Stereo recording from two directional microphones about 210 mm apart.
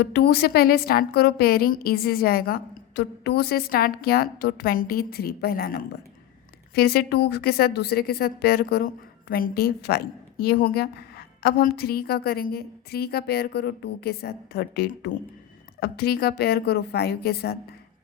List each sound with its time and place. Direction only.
0.0 s speech: 50° left (ahead or behind)